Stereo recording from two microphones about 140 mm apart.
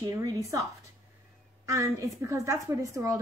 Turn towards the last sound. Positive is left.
turn(degrees=-25)  # may be behind; listen again after turning